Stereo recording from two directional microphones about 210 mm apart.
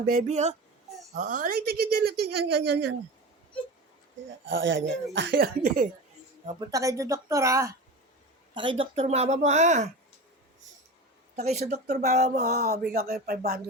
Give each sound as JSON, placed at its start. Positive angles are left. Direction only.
{"t": 0.1, "sound": "speech", "side_deg": -35}
{"t": 4.4, "sound": "speech", "side_deg": -65}
{"t": 6.4, "sound": "speech", "side_deg": -20}
{"t": 8.8, "sound": "speech", "side_deg": -30}
{"t": 11.3, "sound": "speech", "side_deg": -30}
{"t": 12.6, "sound": "speech", "side_deg": -45}